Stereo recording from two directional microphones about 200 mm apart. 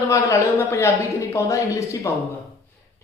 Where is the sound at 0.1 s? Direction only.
15° left (ahead or behind).